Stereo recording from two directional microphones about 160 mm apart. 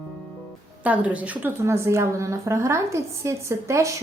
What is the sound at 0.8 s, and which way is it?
A woman's voice, 10° right (ahead or behind).